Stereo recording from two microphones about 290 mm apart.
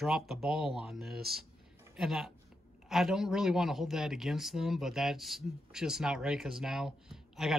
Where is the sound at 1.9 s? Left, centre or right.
Centre.